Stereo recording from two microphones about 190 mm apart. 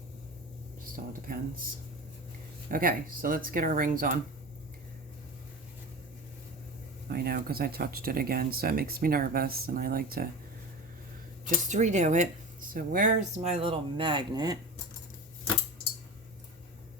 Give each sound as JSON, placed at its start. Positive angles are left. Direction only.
{"t": 0.9, "sound": "speech", "side_deg": -45}
{"t": 7.1, "sound": "speech", "side_deg": -50}
{"t": 11.4, "sound": "speech", "side_deg": -40}